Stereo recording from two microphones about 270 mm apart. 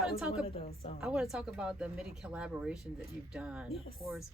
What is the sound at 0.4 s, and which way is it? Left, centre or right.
Speech, left.